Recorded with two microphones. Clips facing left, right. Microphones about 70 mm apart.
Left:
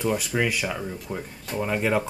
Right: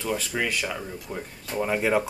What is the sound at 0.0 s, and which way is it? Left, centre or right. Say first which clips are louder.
Speech: left 3 dB; centre.